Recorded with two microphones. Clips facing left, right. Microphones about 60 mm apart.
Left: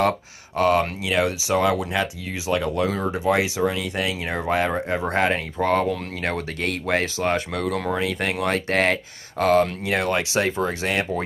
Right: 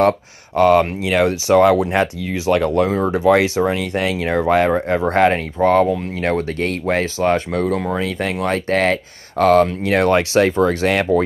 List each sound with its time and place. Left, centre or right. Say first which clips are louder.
0.6 s speech: right 6 dB; right
2.9 s speech: right 7 dB; right
3.3 s speech: right 6 dB; right
8.0 s speech: right 3 dB; right